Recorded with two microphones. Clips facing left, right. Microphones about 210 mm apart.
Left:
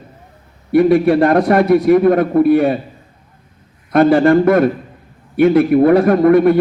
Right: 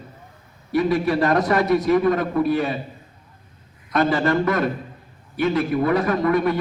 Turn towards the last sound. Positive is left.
turn(degrees=55)  # may be behind; listen again after turning